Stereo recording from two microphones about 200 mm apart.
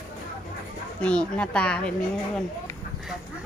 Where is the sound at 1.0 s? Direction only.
5° left (ahead or behind).